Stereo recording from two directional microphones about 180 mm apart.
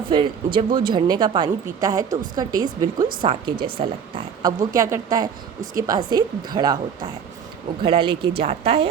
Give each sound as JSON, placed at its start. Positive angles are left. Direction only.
{"t": 0.1, "sound": "a woman's voice", "side_deg": -25}
{"t": 4.4, "sound": "a woman's voice", "side_deg": -20}